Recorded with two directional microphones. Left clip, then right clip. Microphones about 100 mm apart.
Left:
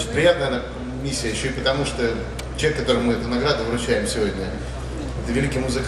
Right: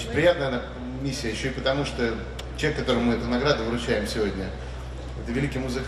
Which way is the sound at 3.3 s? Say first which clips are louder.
Left 1 dB; 40° left (ahead or behind).